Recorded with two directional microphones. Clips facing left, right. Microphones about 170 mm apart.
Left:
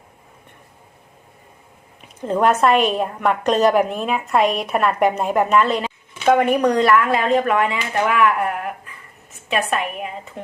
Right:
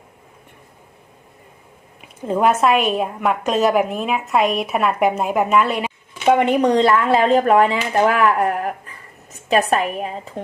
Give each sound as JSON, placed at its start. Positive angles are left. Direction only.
{"t": 2.0, "sound": "a woman's voice", "side_deg": -5}